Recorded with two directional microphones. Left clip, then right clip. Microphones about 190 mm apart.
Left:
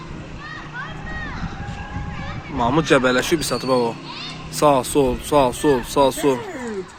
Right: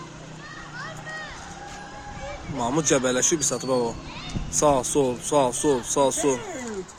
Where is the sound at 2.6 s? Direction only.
5° right (ahead or behind).